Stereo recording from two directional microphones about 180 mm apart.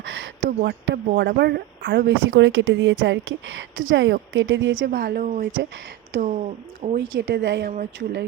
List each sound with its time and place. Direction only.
0.0 s a sound: 90° right
1.0 s speech: 60° right (ahead or behind); by 4.9 s 90° right
4.9 s speech: 55° right (ahead or behind)
7.1 s speech: 80° right